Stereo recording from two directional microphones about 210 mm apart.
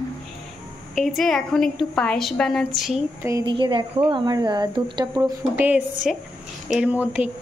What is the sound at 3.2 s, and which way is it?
Speech, 20° right (ahead or behind).